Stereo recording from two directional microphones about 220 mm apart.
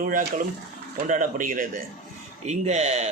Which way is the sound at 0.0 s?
35° right (ahead or behind).